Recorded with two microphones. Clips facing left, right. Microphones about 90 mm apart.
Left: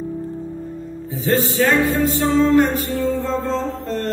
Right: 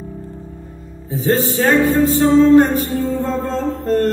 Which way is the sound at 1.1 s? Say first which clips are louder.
Right 2 dB; 35° right (ahead or behind).